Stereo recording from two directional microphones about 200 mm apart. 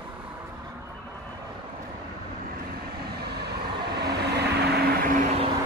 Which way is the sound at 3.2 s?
55° right (ahead or behind).